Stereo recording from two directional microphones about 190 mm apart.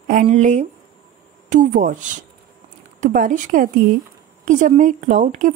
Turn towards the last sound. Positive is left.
turn(degrees=-40)  # may be behind; listen again after turning